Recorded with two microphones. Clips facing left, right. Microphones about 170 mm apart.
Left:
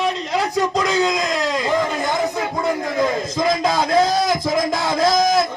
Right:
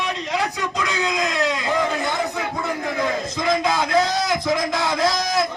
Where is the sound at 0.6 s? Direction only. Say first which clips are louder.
Left 6 dB; 40° left (ahead or behind).